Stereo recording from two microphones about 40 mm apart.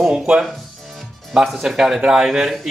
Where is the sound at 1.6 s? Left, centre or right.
Centre.